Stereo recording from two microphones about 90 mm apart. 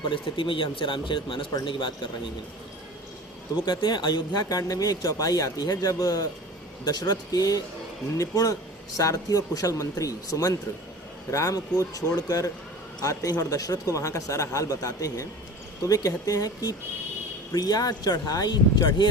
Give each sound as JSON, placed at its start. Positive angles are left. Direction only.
{"t": 0.1, "sound": "speech", "side_deg": 70}
{"t": 3.7, "sound": "speech", "side_deg": 55}